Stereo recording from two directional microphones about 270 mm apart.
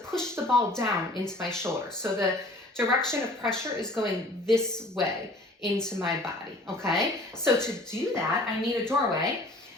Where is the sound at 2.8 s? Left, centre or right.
Centre.